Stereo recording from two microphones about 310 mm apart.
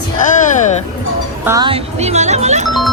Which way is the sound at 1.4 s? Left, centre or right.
Centre.